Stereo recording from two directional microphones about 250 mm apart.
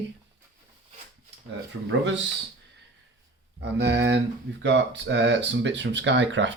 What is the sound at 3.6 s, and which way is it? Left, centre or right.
Speech, right.